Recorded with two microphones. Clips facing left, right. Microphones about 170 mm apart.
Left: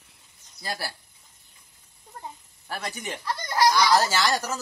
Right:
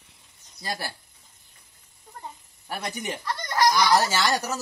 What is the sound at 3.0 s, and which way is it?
Speech, centre (ahead or behind).